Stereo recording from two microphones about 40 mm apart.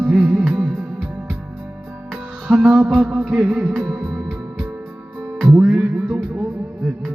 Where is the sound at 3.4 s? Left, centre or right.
Right.